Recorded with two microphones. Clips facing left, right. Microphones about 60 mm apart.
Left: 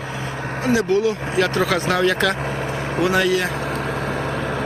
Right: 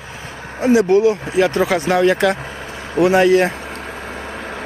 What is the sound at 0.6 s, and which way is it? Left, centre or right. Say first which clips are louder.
Speech: right 6 dB; right.